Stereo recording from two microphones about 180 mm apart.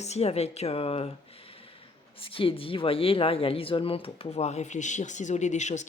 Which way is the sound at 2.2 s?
30° left (ahead or behind).